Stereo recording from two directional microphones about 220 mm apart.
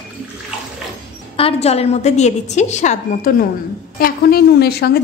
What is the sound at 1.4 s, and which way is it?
A woman's voice, 25° left (ahead or behind).